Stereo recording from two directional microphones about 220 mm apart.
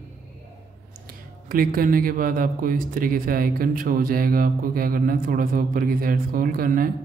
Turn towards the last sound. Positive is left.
turn(degrees=-40)  # may be behind; listen again after turning